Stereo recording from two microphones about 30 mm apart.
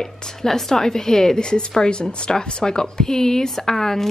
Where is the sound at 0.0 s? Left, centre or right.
Centre.